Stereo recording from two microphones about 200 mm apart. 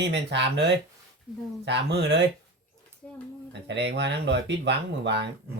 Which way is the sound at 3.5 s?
60° right (ahead or behind).